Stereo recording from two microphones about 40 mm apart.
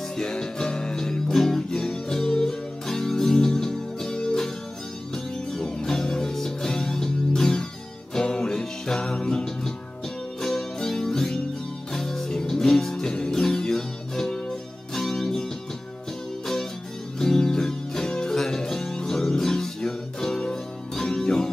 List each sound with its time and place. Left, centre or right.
0.2 s music: centre
17.2 s music: centre